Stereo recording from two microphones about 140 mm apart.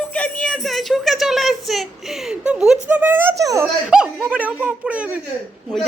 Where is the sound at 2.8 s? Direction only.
10° right (ahead or behind).